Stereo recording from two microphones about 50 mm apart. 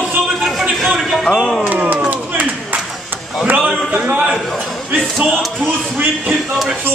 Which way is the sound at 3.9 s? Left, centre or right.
Right.